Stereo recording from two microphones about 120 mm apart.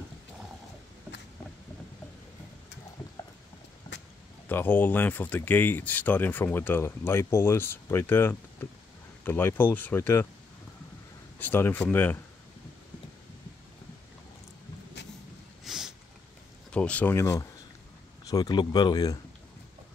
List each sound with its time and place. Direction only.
4.5 s speech: 15° left (ahead or behind)
11.3 s speech: 15° left (ahead or behind)
15.6 s a sound: 5° right (ahead or behind)
16.7 s speech: 10° left (ahead or behind); by 19.1 s 35° left (ahead or behind)